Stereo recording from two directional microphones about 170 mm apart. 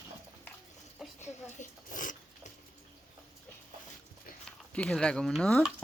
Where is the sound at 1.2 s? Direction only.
45° left (ahead or behind).